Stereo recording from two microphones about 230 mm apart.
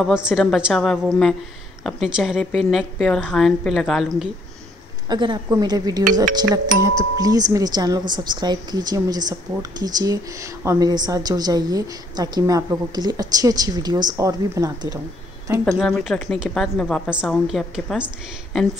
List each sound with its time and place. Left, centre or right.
0.0 s a woman's voice: centre
5.1 s speech: centre
15.8 s a woman's voice: centre